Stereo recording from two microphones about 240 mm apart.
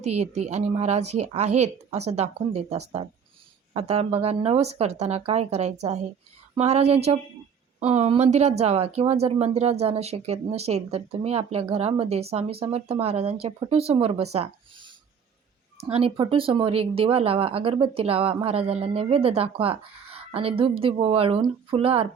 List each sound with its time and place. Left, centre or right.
0.0 s speech: right